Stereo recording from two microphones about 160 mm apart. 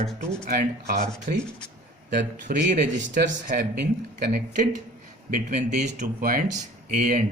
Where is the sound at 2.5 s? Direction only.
65° right (ahead or behind).